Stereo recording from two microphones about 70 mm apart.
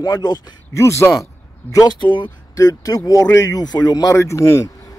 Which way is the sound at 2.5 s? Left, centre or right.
Left.